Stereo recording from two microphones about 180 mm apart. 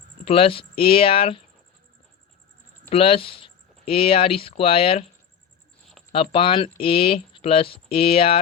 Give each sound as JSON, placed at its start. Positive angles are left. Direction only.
{"t": 0.3, "sound": "speech", "side_deg": 30}
{"t": 2.9, "sound": "speech", "side_deg": 30}
{"t": 6.1, "sound": "speech", "side_deg": 30}